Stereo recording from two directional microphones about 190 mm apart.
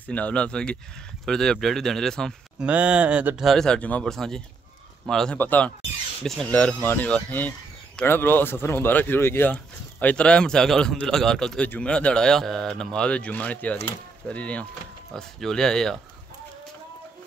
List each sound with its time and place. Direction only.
0.0 s speech: 5° left (ahead or behind)